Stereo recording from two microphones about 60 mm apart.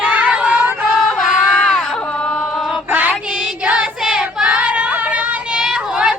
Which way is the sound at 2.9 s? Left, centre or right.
Right.